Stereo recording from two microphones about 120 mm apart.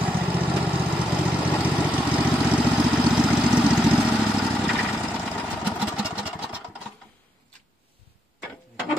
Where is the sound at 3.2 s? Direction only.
10° right (ahead or behind).